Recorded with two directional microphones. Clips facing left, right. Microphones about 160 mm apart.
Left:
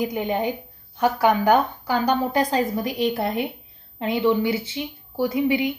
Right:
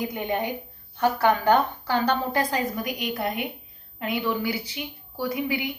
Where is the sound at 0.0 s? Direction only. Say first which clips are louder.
Left 4 dB; 20° left (ahead or behind).